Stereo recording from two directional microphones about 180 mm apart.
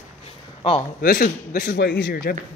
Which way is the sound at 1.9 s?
65° left (ahead or behind).